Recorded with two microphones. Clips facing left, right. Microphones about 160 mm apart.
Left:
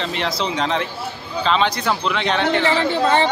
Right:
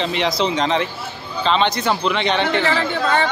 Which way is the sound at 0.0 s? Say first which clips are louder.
Right 3 dB; centre (ahead or behind).